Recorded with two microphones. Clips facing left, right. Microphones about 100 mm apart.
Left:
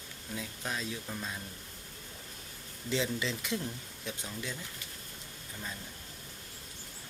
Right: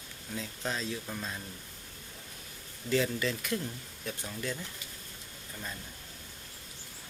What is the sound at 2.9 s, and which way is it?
Speech, 20° left (ahead or behind).